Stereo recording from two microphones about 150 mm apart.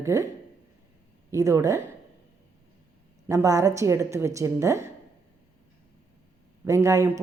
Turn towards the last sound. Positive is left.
turn(degrees=-20)  # may be behind; listen again after turning